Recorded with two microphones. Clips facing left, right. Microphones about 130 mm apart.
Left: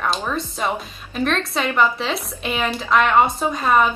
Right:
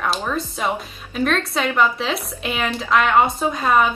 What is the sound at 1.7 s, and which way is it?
Speech, centre (ahead or behind).